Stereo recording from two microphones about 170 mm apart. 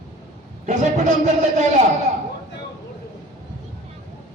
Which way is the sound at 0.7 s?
45° right (ahead or behind).